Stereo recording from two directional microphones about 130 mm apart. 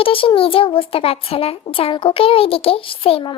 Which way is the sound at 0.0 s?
45° left (ahead or behind).